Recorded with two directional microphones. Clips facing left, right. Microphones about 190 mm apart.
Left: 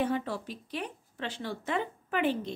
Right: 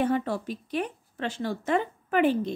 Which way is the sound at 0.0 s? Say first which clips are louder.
Right 4 dB; 55° right (ahead or behind).